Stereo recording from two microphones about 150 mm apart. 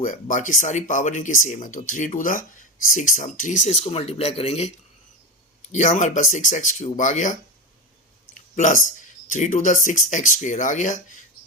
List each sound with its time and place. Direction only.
0.0 s speech: 60° left (ahead or behind); by 4.7 s 45° left (ahead or behind)
5.7 s speech: 55° left (ahead or behind)
8.5 s speech: 60° left (ahead or behind)